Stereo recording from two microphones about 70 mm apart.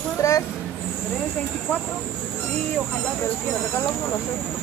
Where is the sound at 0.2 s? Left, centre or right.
Left.